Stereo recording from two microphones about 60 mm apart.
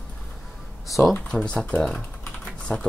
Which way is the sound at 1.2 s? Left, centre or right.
Centre.